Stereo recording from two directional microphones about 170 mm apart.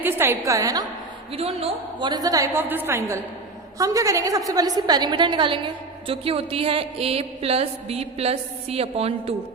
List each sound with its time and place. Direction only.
0.0 s a woman's voice: 15° right (ahead or behind)
1.3 s a woman's voice: 35° right (ahead or behind)